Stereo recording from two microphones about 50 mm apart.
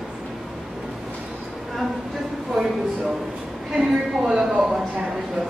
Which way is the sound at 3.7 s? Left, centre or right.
Centre.